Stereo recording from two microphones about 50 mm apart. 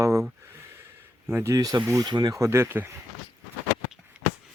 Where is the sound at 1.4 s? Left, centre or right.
Right.